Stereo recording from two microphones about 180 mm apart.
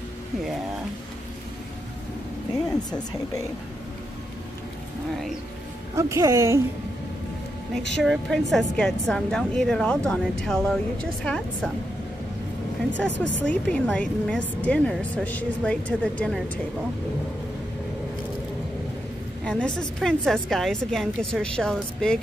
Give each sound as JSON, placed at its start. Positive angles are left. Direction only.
{"t": 2.7, "sound": "speech", "side_deg": 20}
{"t": 5.9, "sound": "a woman's voice", "side_deg": -15}
{"t": 7.7, "sound": "a woman's voice", "side_deg": 0}
{"t": 12.9, "sound": "a woman's voice", "side_deg": 85}
{"t": 13.4, "sound": "speech", "side_deg": 5}
{"t": 19.4, "sound": "a woman's voice", "side_deg": 5}